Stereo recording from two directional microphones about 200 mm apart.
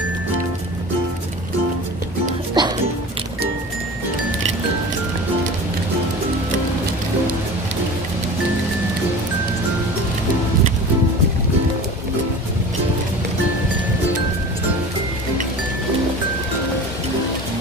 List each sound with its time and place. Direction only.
2.6 s music: 20° right (ahead or behind)